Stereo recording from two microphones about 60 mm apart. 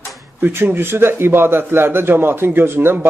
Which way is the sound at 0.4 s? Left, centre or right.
Right.